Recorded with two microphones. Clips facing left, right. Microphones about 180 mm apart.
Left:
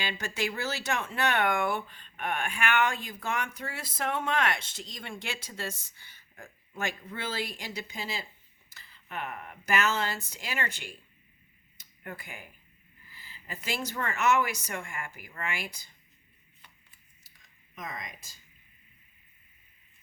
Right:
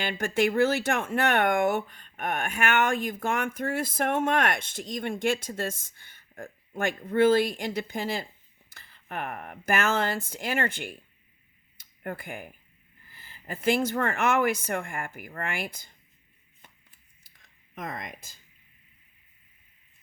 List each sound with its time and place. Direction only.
0.0 s speech: 50° right (ahead or behind)
11.8 s cutlery: 55° right (ahead or behind)
13.1 s speech: 50° right (ahead or behind)
17.7 s speech: 55° right (ahead or behind)